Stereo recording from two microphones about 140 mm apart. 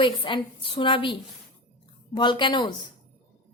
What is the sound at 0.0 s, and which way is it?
A woman's voice, 35° left (ahead or behind).